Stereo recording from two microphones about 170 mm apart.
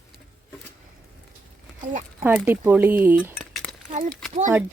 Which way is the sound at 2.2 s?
10° right (ahead or behind).